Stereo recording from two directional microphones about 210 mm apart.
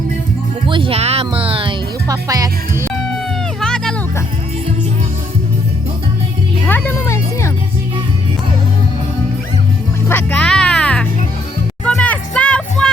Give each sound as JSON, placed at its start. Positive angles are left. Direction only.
{"t": 0.6, "sound": "music", "side_deg": -25}
{"t": 3.6, "sound": "music", "side_deg": 0}
{"t": 6.7, "sound": "music", "side_deg": 10}
{"t": 10.1, "sound": "music", "side_deg": 5}